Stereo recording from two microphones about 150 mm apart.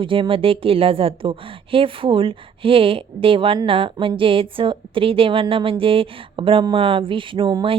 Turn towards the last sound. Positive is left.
turn(degrees=-30)  # may be behind; listen again after turning